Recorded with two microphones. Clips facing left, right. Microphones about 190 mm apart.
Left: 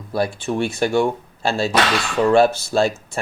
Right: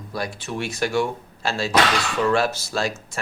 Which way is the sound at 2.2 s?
30° left (ahead or behind).